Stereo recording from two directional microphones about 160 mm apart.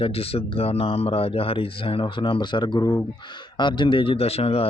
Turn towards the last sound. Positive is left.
turn(degrees=40)  # may be behind; listen again after turning